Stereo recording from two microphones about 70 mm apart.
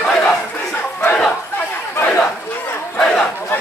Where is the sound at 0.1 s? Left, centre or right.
Centre.